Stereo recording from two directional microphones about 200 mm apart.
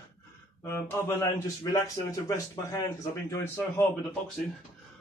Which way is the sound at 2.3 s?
15° left (ahead or behind).